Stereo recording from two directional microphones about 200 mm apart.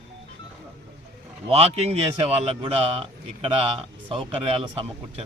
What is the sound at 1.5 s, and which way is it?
Speech, 30° right (ahead or behind).